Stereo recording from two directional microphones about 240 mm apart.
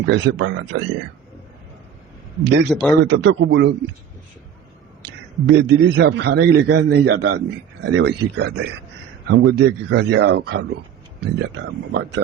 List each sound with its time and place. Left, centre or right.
0.0 s a man's voice: right
2.4 s a man's voice: right
5.5 s a man's voice: right